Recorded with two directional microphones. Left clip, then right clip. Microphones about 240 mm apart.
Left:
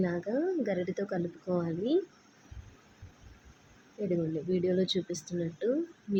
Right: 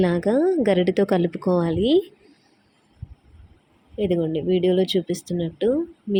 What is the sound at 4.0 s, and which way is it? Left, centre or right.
A woman's voice, right.